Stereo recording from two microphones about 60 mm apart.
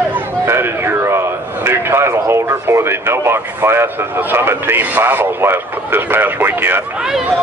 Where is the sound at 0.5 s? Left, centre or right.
Right.